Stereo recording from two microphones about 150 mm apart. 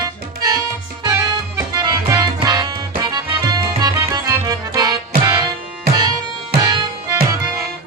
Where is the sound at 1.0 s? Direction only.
20° right (ahead or behind).